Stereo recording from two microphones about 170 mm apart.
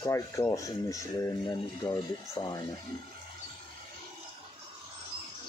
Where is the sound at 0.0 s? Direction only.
15° left (ahead or behind).